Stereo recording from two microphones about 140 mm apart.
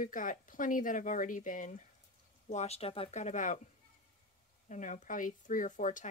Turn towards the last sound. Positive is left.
turn(degrees=65)  # may be behind; listen again after turning